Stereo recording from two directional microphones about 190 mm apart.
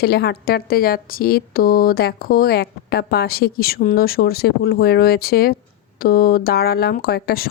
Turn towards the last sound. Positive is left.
turn(degrees=55)  # may be behind; listen again after turning